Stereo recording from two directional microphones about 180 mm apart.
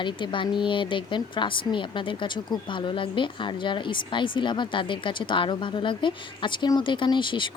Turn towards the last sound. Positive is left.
turn(degrees=25)  # may be behind; listen again after turning